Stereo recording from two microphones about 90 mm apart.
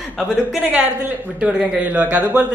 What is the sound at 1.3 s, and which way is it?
A man's voice, 10° right (ahead or behind).